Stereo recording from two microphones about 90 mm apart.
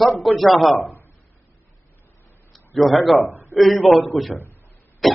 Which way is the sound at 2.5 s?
Centre (ahead or behind).